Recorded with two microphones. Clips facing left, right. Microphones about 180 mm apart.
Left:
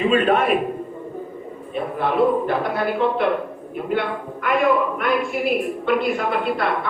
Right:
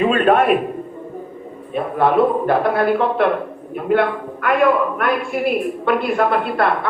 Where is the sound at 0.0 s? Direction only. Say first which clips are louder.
Right 3 dB; 50° right (ahead or behind).